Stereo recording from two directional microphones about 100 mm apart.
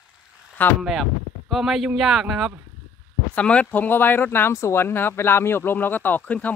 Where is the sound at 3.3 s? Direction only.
10° left (ahead or behind).